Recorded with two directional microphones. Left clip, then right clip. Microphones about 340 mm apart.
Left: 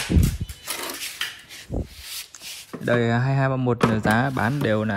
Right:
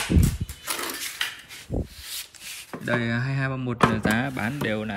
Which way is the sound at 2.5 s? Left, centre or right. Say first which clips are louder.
Left 4 dB; centre.